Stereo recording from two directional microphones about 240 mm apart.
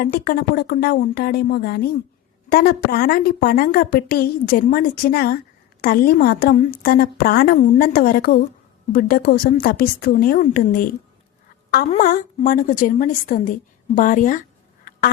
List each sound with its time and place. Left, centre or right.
0.0 s a woman's voice: left
11.9 s a woman's voice: left